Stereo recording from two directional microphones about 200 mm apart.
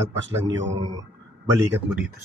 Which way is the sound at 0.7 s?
20° right (ahead or behind).